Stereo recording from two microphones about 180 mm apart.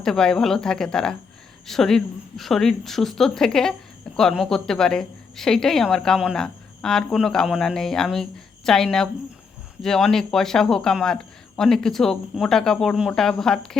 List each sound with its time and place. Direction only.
0.0 s a woman's voice: 5° left (ahead or behind)